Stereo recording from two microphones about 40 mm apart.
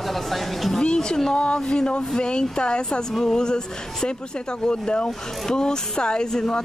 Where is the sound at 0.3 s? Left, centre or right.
Centre.